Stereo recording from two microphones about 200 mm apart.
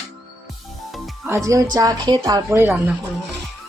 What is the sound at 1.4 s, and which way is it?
A woman's voice, 15° right (ahead or behind).